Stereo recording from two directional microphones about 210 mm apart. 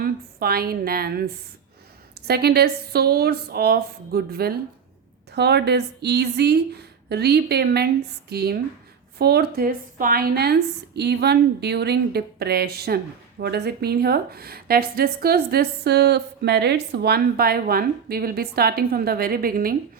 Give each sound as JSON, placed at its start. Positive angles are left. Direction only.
{"t": 0.0, "sound": "a woman's voice", "side_deg": -45}
{"t": 2.2, "sound": "a woman's voice", "side_deg": -50}